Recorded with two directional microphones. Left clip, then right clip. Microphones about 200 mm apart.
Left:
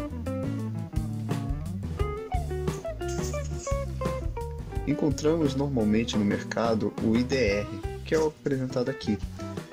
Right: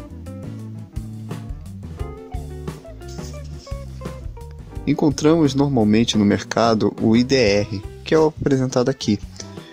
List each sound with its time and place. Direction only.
0.3 s music: centre (ahead or behind)
2.0 s music: centre (ahead or behind)
4.8 s speech: 45° right (ahead or behind)